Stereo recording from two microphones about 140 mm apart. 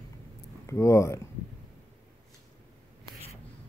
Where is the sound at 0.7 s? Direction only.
20° left (ahead or behind).